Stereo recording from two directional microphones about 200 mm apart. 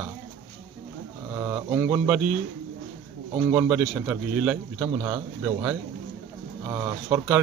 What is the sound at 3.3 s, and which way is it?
A man's voice, 10° right (ahead or behind).